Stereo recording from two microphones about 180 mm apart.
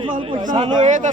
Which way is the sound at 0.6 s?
40° right (ahead or behind).